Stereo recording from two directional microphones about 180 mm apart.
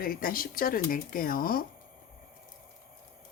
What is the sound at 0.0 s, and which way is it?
Speech, 55° left (ahead or behind).